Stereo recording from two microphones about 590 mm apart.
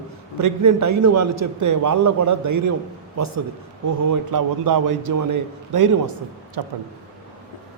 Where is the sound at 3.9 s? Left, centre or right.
Right.